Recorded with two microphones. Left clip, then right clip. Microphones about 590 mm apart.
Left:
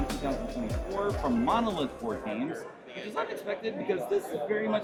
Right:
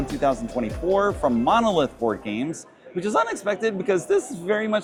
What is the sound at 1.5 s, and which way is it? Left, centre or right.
A man's voice, right.